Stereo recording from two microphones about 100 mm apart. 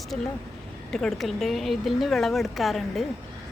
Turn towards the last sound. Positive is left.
turn(degrees=0)  # may be behind; listen again after turning